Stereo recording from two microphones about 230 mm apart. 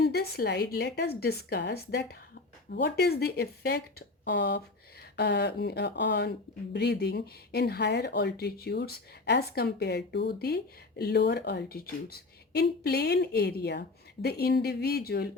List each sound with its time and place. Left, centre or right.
0.0 s speech: left